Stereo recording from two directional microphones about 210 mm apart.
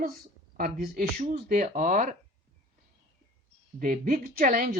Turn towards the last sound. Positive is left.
turn(degrees=-45)  # may be behind; listen again after turning